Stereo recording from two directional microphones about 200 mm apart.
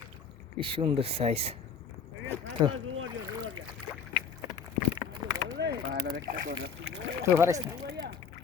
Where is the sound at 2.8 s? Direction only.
90° right.